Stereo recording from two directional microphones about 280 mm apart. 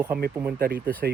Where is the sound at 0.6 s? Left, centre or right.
Right.